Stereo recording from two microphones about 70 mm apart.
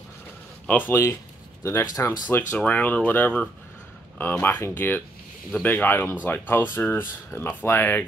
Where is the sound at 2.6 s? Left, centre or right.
Left.